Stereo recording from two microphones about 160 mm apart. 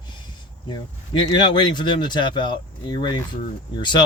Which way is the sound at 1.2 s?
30° left (ahead or behind).